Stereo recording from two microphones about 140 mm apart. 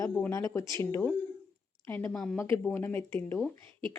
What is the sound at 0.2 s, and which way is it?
Speech, 20° left (ahead or behind).